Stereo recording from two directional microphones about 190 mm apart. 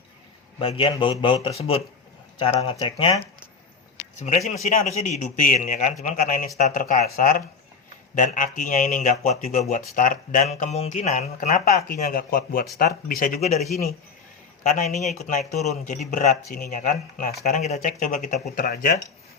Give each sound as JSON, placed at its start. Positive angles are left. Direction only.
{"t": 0.6, "sound": "speech", "side_deg": 30}
{"t": 4.2, "sound": "a man's voice", "side_deg": 35}
{"t": 13.4, "sound": "a man's voice", "side_deg": 0}
{"t": 14.6, "sound": "a man's voice", "side_deg": 40}